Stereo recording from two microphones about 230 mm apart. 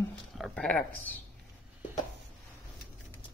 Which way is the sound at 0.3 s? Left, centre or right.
Centre.